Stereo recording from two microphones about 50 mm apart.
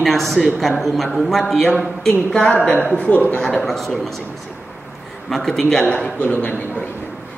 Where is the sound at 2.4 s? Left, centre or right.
Left.